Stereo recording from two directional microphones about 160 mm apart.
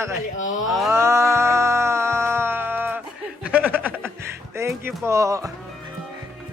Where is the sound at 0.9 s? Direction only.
15° right (ahead or behind).